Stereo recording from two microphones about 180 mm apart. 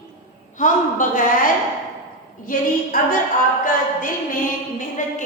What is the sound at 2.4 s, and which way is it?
Speech, 50° left (ahead or behind).